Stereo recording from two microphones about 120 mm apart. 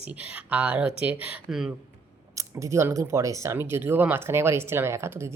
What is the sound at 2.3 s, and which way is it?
Speech, 25° right (ahead or behind).